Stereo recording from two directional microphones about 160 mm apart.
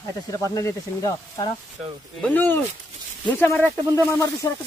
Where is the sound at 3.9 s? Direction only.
20° left (ahead or behind).